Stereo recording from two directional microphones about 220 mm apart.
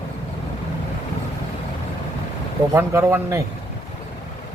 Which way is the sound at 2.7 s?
10° right (ahead or behind).